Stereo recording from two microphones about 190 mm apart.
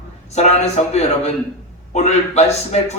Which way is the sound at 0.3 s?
35° left (ahead or behind).